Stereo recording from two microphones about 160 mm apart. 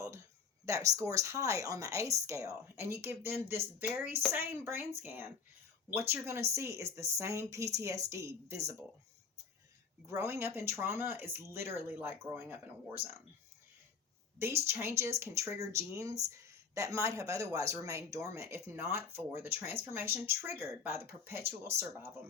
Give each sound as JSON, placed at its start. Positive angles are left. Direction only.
{"t": 0.6, "sound": "speech", "side_deg": -20}
{"t": 10.1, "sound": "speech", "side_deg": -15}
{"t": 14.3, "sound": "speech", "side_deg": -15}